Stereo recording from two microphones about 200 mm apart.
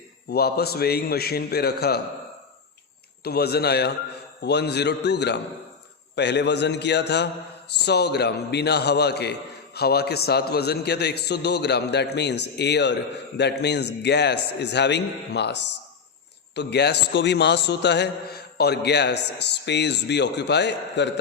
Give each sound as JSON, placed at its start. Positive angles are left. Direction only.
{"t": 0.3, "sound": "a man's voice", "side_deg": 50}
{"t": 3.2, "sound": "a man's voice", "side_deg": 50}